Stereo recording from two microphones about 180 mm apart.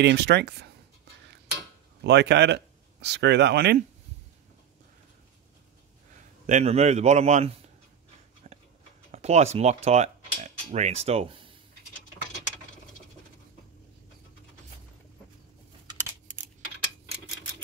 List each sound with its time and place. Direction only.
0.0 s speech: 70° right (ahead or behind)
2.0 s speech: 75° right (ahead or behind)
6.4 s a man's voice: 40° right (ahead or behind)
8.5 s a sound: 40° right (ahead or behind)
9.1 s speech: 35° right (ahead or behind)